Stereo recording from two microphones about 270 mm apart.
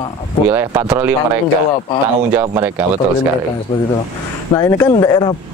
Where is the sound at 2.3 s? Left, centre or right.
Centre.